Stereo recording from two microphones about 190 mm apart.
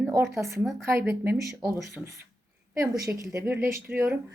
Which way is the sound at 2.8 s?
15° right (ahead or behind).